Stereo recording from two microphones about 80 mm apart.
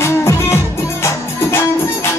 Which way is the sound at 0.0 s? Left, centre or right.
Left.